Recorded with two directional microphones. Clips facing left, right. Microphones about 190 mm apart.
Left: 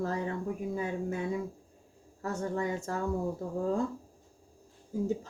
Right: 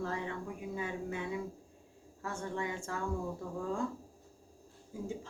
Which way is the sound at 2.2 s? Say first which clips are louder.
Left 5 dB; 40° left (ahead or behind).